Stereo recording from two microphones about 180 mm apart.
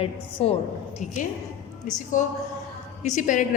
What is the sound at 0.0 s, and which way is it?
Speech, 35° left (ahead or behind).